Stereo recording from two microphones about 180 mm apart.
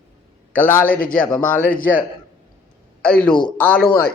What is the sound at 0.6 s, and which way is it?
A man's voice, 10° left (ahead or behind).